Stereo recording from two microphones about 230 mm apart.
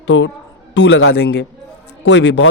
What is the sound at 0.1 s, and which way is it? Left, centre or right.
A man's voice, left.